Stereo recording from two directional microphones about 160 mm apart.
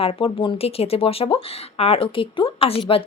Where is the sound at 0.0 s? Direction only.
35° left (ahead or behind).